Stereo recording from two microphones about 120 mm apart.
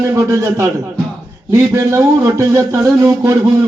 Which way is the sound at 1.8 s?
25° right (ahead or behind).